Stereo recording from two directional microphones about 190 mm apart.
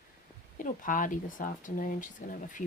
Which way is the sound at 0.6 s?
45° left (ahead or behind).